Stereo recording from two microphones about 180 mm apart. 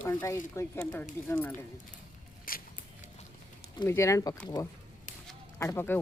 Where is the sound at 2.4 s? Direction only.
55° left (ahead or behind).